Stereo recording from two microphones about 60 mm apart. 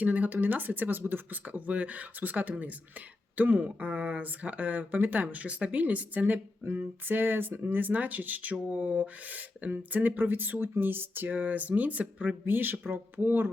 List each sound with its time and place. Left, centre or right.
0.0 s speech: right